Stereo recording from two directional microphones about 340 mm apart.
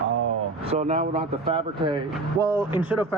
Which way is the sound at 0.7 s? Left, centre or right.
Centre.